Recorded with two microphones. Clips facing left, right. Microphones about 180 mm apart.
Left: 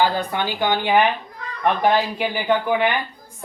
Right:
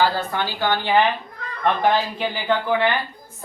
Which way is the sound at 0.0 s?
15° left (ahead or behind).